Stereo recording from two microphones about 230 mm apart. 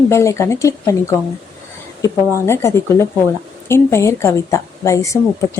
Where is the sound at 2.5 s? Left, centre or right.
Centre.